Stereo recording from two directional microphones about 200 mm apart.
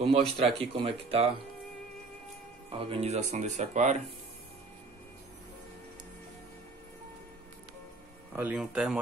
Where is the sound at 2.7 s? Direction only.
25° right (ahead or behind).